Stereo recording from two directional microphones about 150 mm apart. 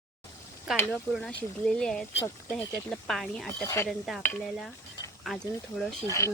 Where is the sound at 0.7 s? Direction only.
5° right (ahead or behind).